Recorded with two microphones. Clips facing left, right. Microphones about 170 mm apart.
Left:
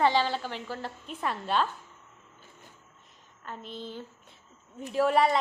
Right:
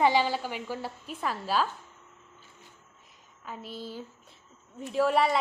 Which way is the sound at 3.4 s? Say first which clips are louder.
Even; 5° right (ahead or behind).